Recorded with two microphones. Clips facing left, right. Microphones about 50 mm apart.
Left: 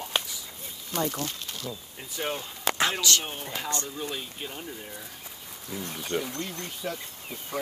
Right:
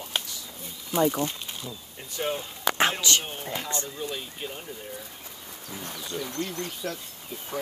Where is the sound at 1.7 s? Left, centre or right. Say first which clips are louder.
Left 1 dB; centre.